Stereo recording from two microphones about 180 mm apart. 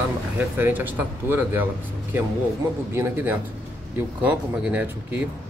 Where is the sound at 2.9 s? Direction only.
15° right (ahead or behind).